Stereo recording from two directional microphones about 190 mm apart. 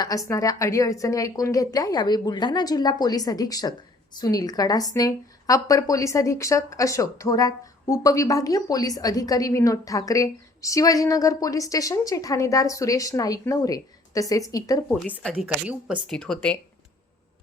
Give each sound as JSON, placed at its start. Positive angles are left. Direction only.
{"t": 0.0, "sound": "a woman's voice", "side_deg": 20}
{"t": 15.2, "sound": "speech", "side_deg": 5}
{"t": 15.4, "sound": "speech", "side_deg": -5}